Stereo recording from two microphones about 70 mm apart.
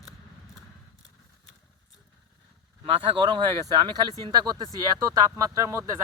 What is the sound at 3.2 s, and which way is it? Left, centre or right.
Speech, right.